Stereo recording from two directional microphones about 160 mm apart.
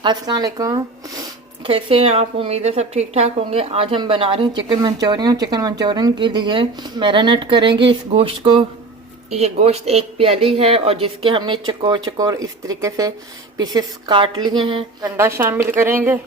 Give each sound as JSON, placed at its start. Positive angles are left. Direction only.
{"t": 0.0, "sound": "speech", "side_deg": -25}
{"t": 1.6, "sound": "a woman's voice", "side_deg": -35}
{"t": 15.1, "sound": "a woman's voice", "side_deg": -15}